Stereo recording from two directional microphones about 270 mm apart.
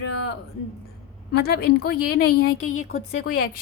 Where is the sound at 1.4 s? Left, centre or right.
Left.